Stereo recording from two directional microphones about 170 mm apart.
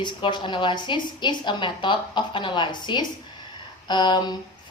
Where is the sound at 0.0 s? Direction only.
25° left (ahead or behind).